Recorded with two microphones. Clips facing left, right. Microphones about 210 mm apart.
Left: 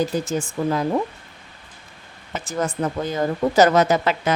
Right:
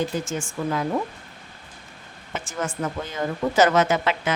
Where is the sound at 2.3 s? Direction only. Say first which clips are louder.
Left 4 dB; 35° left (ahead or behind).